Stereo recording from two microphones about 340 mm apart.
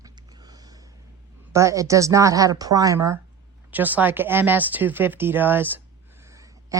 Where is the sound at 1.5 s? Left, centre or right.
Centre.